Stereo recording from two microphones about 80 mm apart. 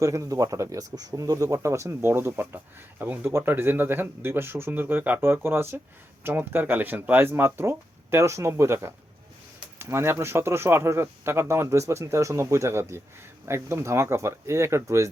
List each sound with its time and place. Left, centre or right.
0.0 s speech: right